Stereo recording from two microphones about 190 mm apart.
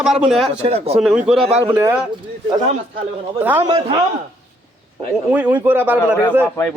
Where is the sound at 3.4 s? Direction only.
10° right (ahead or behind).